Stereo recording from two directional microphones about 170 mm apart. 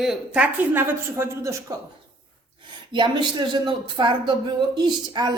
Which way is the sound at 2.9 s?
25° right (ahead or behind).